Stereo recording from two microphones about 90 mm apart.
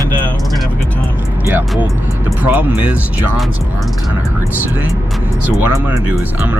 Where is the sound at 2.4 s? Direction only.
20° right (ahead or behind).